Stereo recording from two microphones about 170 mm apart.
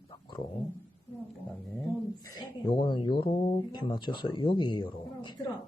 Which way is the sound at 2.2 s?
30° left (ahead or behind).